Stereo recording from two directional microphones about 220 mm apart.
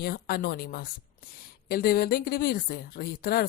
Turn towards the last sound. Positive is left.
turn(degrees=40)  # may be behind; listen again after turning